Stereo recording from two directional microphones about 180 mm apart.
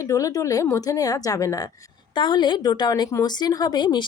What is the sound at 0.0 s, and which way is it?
A woman's voice, 20° left (ahead or behind).